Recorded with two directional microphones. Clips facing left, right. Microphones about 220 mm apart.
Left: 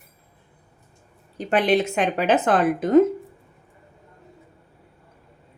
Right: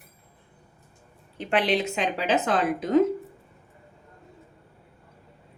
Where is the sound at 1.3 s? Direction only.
50° left (ahead or behind).